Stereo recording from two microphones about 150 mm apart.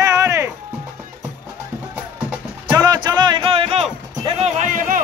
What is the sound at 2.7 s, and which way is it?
Music, 25° right (ahead or behind).